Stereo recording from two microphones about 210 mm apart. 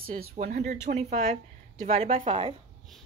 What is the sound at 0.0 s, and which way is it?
A woman's voice, 40° right (ahead or behind).